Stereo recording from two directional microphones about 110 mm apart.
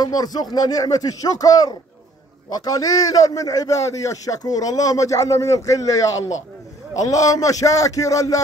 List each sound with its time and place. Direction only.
0.0 s a man's voice: 35° left (ahead or behind)